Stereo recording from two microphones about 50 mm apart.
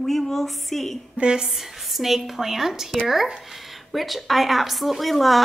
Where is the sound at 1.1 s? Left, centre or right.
Right.